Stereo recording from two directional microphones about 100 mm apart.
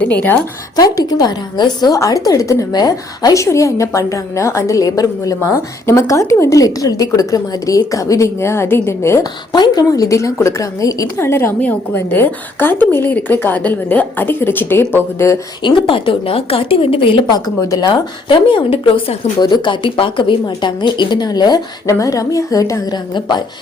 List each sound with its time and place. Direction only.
0.0 s a woman's voice: 15° left (ahead or behind)
0.8 s a woman's voice: 40° left (ahead or behind)
9.5 s a woman's voice: 45° left (ahead or behind)
11.2 s a woman's voice: 25° left (ahead or behind)
15.6 s a woman's voice: 55° left (ahead or behind)
17.3 s a woman's voice: 40° left (ahead or behind)
18.3 s a woman's voice: 55° left (ahead or behind)
19.4 s a woman's voice: 50° left (ahead or behind); by 23.0 s 35° left (ahead or behind)